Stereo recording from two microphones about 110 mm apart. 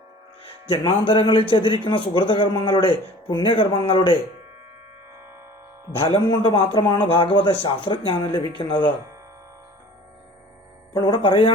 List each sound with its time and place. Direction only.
0.4 s speech: 50° left (ahead or behind)
5.9 s speech: 60° left (ahead or behind)
6.2 s speech: 45° left (ahead or behind)
10.9 s speech: 45° left (ahead or behind)